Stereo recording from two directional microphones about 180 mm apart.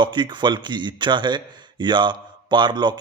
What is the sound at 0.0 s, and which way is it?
A man's voice, 25° right (ahead or behind).